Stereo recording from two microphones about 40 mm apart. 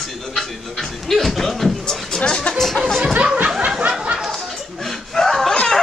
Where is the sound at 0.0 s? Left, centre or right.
Centre.